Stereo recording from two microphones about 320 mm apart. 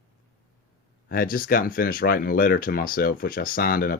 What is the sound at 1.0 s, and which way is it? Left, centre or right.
Speech, left.